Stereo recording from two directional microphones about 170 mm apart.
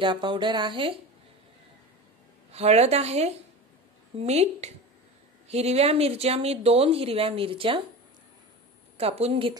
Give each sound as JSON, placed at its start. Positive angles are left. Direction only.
{"t": 0.0, "sound": "speech", "side_deg": -30}
{"t": 2.5, "sound": "speech", "side_deg": -40}
{"t": 8.9, "sound": "speech", "side_deg": -35}